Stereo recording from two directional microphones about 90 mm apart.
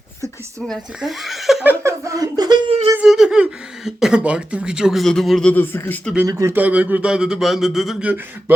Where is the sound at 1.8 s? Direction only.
35° right (ahead or behind).